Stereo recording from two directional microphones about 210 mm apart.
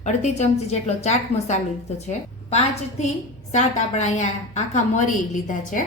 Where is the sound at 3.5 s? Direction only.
35° left (ahead or behind).